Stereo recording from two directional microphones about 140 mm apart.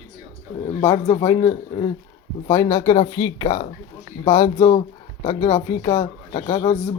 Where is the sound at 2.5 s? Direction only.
20° left (ahead or behind).